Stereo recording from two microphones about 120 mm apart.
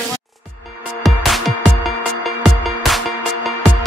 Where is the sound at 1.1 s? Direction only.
Centre (ahead or behind).